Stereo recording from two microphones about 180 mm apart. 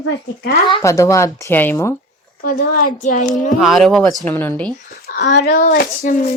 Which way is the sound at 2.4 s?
45° left (ahead or behind).